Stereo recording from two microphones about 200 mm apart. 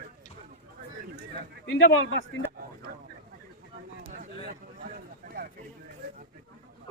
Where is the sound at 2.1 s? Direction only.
70° left (ahead or behind).